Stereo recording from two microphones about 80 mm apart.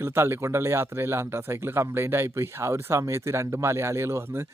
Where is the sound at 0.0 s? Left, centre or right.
Right.